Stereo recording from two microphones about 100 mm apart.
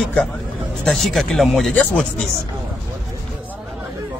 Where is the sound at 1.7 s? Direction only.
15° left (ahead or behind).